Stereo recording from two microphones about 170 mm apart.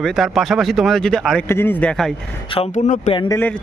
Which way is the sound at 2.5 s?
40° left (ahead or behind).